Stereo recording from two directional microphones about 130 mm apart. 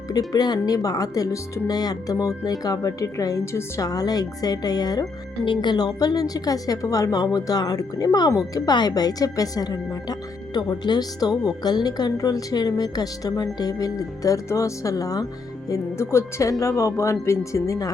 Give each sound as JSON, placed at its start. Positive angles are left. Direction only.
{"t": 0.1, "sound": "a woman's voice", "side_deg": 30}